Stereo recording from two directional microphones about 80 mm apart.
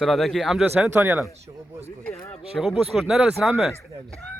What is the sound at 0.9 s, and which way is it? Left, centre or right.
Speech, right.